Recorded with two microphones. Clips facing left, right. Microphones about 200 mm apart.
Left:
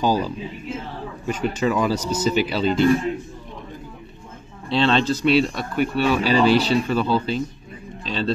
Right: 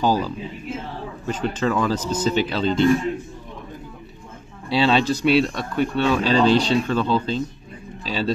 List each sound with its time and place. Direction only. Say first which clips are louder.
0.0 s speech: even; 15° left (ahead or behind)
4.6 s speech: even; 10° right (ahead or behind)
5.3 s speech: even; centre (ahead or behind)
8.0 s a man's voice: right 1 dB; 5° right (ahead or behind)